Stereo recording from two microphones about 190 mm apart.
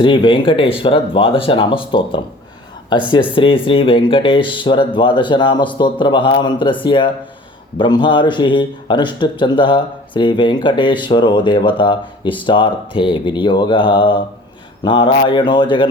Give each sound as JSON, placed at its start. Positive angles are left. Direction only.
{"t": 0.0, "sound": "a man's voice", "side_deg": 25}